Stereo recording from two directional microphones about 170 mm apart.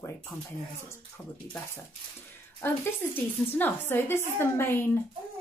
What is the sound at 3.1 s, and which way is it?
Speech, 10° left (ahead or behind).